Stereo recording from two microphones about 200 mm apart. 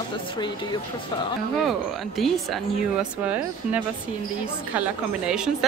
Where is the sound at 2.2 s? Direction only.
Centre (ahead or behind).